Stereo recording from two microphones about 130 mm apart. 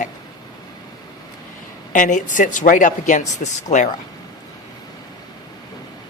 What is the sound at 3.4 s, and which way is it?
Speech, 65° left (ahead or behind).